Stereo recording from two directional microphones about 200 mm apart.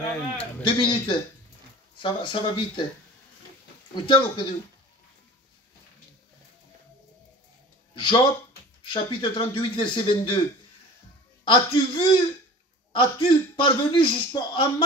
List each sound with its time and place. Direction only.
0.7 s a man's voice: 25° left (ahead or behind)
3.9 s a man's voice: 25° left (ahead or behind)
7.9 s a man's voice: 25° left (ahead or behind)
11.4 s a man's voice: 25° left (ahead or behind)